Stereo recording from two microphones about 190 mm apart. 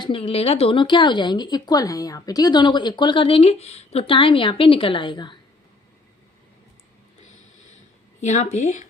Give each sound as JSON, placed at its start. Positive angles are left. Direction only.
{"t": 0.0, "sound": "speech", "side_deg": 30}
{"t": 8.2, "sound": "speech", "side_deg": 40}